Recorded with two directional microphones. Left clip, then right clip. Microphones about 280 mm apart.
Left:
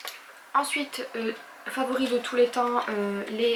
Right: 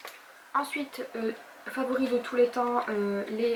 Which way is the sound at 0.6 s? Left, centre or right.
Centre.